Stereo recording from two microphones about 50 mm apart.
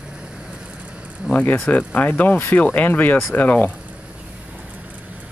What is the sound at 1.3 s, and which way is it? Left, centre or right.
Speech, left.